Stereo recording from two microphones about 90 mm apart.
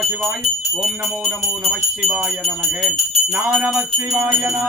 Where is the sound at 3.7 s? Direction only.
5° right (ahead or behind).